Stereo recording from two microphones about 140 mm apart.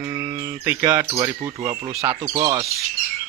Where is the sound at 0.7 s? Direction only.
15° right (ahead or behind).